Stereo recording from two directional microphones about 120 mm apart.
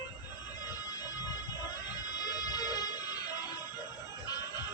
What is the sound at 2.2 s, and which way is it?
Music, 35° left (ahead or behind).